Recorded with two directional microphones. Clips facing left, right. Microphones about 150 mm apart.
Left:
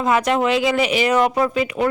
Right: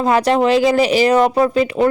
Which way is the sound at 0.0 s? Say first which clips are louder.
Right 4 dB; 35° right (ahead or behind).